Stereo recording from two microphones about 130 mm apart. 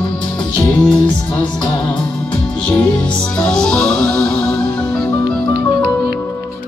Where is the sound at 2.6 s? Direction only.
5° left (ahead or behind).